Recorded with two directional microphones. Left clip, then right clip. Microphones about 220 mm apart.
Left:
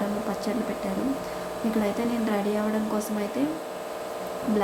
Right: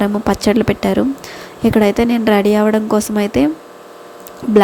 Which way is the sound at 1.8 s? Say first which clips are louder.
Right 14 dB; 40° right (ahead or behind).